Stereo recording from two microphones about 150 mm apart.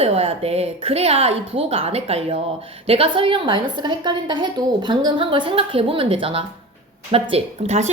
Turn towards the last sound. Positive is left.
turn(degrees=-50)  # may be behind; listen again after turning